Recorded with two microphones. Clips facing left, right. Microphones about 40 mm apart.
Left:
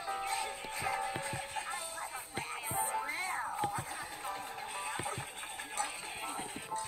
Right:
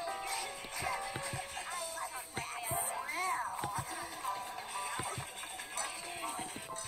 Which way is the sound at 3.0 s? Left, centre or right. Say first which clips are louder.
Right 1 dB; left.